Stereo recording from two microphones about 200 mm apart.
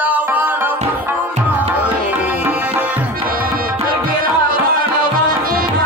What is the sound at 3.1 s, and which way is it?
Tabla, 45° right (ahead or behind).